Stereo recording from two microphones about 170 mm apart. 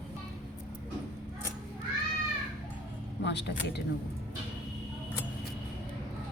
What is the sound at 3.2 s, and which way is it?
Speech, 90° left.